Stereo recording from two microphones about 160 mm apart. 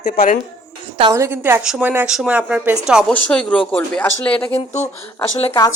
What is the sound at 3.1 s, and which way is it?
Speech, 5° left (ahead or behind).